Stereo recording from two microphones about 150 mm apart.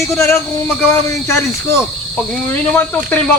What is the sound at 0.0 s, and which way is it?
Speech, 20° left (ahead or behind).